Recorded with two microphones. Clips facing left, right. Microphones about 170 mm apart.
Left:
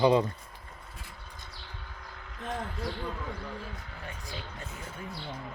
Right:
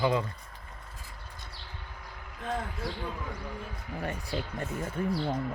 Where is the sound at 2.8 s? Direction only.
5° right (ahead or behind).